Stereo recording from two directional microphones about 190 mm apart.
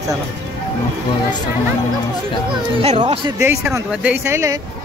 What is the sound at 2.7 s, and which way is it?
Speech, 30° right (ahead or behind).